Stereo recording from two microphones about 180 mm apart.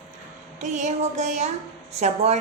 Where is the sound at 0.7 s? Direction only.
40° right (ahead or behind).